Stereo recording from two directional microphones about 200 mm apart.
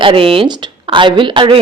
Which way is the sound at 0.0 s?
25° right (ahead or behind).